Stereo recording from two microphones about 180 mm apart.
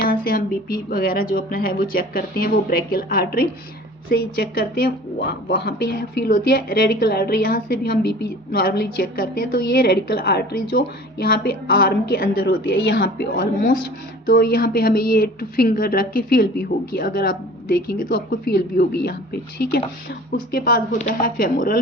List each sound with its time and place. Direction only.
0.0 s a woman's voice: 55° left (ahead or behind)
20.9 s a woman's voice: 45° left (ahead or behind)